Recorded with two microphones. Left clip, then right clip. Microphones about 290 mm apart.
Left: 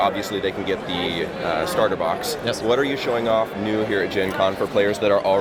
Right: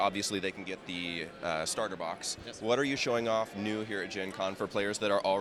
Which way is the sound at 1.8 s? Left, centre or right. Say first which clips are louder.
Left 15 dB; right.